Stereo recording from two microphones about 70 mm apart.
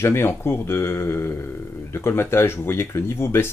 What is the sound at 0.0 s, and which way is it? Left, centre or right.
Speech, left.